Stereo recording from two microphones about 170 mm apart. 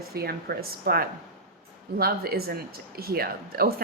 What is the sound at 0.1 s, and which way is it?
A woman's voice, 65° right (ahead or behind).